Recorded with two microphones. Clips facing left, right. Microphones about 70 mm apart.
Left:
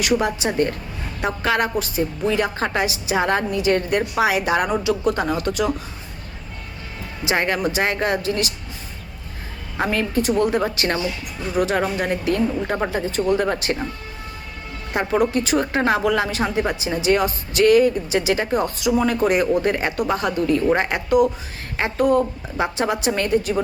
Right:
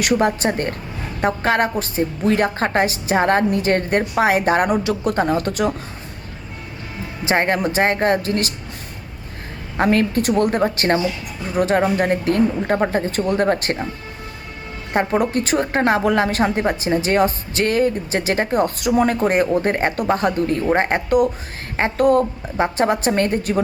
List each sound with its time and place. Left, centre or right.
0.0 s a woman's voice: right
7.3 s a woman's voice: right
9.8 s a woman's voice: right
10.6 s a woman's voice: right
14.9 s a woman's voice: right